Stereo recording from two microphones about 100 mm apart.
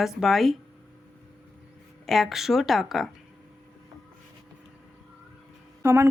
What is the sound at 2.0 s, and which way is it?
Speech, centre (ahead or behind).